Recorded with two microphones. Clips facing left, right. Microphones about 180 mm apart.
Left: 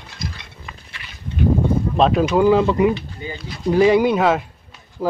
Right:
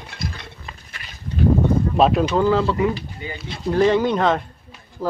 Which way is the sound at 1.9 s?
5° right (ahead or behind).